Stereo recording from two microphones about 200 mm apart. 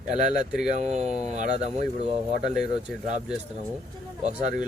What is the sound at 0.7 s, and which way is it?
Speech, 35° right (ahead or behind).